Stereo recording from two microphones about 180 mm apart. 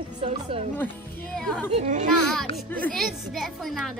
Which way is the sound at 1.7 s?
40° right (ahead or behind).